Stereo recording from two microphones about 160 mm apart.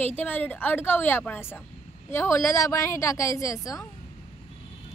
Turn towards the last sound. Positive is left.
turn(degrees=20)  # may be behind; listen again after turning